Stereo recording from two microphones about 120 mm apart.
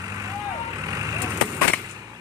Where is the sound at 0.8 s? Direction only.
30° right (ahead or behind).